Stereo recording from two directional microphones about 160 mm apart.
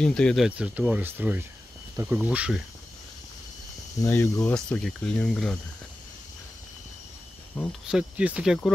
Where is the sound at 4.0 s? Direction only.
15° left (ahead or behind).